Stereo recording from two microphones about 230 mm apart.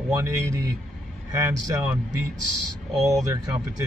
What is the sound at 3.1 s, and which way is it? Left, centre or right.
Speech, centre.